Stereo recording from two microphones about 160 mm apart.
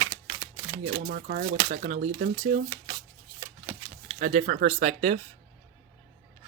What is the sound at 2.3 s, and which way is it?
Speech, 40° right (ahead or behind).